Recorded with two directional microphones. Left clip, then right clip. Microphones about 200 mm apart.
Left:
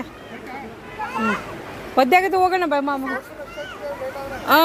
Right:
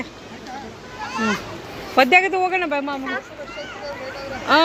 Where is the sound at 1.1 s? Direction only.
45° left (ahead or behind).